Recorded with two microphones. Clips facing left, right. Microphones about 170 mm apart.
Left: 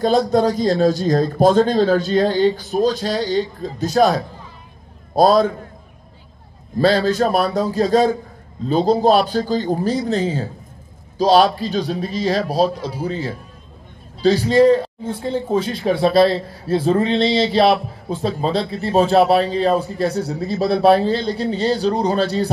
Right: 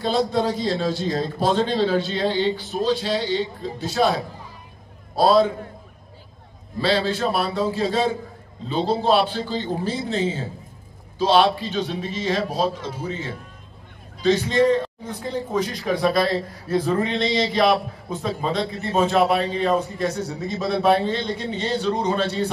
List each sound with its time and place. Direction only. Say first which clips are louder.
0.3 s a man's voice: left 6 dB; 45° left (ahead or behind)
6.8 s a man's voice: left 6 dB; 40° left (ahead or behind)